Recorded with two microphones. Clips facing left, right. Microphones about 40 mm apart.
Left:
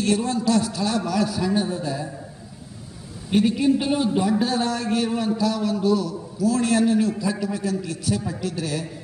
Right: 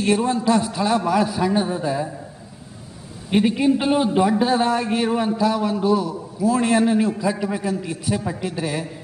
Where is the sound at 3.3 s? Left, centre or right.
Centre.